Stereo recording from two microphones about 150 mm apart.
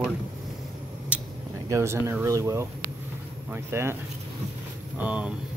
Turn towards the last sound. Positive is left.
turn(degrees=-10)  # may be behind; listen again after turning